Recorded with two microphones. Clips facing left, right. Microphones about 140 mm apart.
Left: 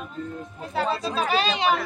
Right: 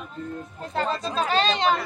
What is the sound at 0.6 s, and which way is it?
Speech, 5° left (ahead or behind).